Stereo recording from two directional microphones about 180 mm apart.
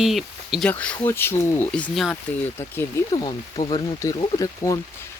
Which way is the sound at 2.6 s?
15° left (ahead or behind).